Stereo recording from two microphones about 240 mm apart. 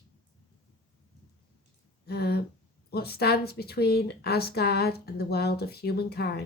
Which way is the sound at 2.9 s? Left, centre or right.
Left.